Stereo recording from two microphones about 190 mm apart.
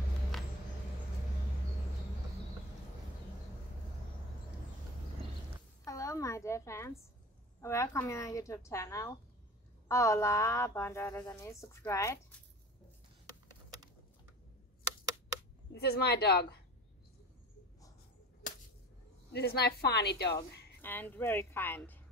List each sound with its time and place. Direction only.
5.9 s a sound: 15° left (ahead or behind)
7.6 s speech: 15° left (ahead or behind)
15.7 s a woman's voice: 60° left (ahead or behind)
18.4 s a sound: 45° left (ahead or behind)
19.3 s a woman's voice: 55° left (ahead or behind)
20.8 s speech: 10° left (ahead or behind)